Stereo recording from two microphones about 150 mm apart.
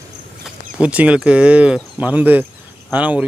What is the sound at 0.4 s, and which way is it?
Speech, 5° right (ahead or behind).